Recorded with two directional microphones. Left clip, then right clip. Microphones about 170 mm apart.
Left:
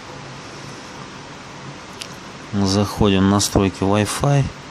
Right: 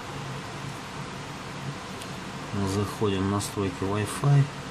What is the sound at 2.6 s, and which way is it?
Speech, 50° left (ahead or behind).